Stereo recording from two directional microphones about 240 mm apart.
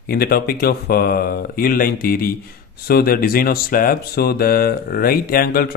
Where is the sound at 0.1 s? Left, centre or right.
Left.